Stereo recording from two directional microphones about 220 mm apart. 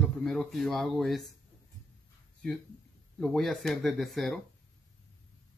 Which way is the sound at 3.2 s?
Centre (ahead or behind).